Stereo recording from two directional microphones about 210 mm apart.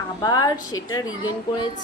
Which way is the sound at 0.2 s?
20° left (ahead or behind).